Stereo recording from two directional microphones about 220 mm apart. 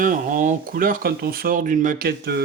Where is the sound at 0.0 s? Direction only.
35° right (ahead or behind).